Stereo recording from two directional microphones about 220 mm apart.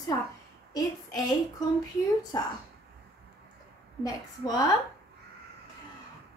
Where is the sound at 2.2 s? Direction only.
20° left (ahead or behind).